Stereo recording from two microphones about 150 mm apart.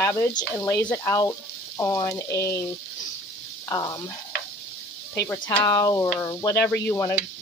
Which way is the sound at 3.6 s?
25° left (ahead or behind).